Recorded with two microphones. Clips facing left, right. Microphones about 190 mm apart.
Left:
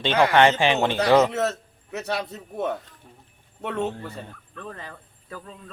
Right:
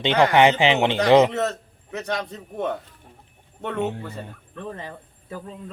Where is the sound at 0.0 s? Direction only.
15° right (ahead or behind).